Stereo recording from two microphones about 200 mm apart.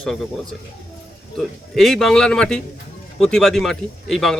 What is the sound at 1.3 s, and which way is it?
Speech, centre (ahead or behind).